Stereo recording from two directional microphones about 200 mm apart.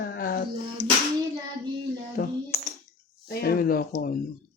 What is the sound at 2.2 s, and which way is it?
Speech, 50° left (ahead or behind).